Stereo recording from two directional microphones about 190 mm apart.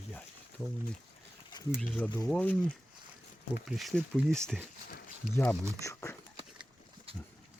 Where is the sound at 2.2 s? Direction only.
5° left (ahead or behind).